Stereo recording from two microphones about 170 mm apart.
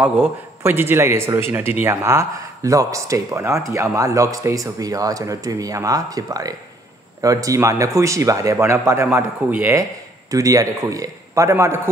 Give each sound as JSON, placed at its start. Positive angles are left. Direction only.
{"t": 0.0, "sound": "a man's voice", "side_deg": -10}